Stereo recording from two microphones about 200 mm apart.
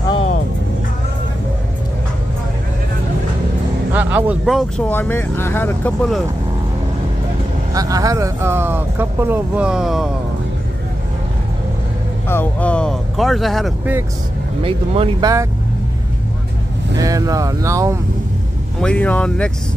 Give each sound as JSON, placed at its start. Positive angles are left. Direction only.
{"t": 0.1, "sound": "music", "side_deg": 30}
{"t": 3.9, "sound": "speech", "side_deg": -10}
{"t": 7.7, "sound": "speech", "side_deg": -15}
{"t": 12.3, "sound": "speech", "side_deg": 10}
{"t": 14.6, "sound": "speech", "side_deg": -25}
{"t": 16.9, "sound": "speech", "side_deg": -15}
{"t": 18.8, "sound": "speech", "side_deg": 5}